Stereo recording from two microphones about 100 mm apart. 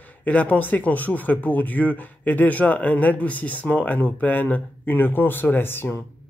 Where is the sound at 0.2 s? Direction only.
15° left (ahead or behind).